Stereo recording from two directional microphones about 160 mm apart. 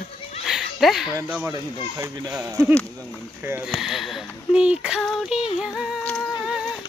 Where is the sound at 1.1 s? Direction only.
15° right (ahead or behind).